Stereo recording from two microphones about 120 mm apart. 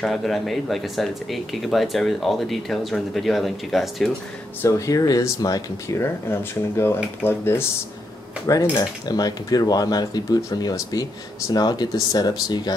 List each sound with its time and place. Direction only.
0.0 s speech: centre (ahead or behind)
4.6 s speech: 25° left (ahead or behind)
8.7 s speech: 35° left (ahead or behind)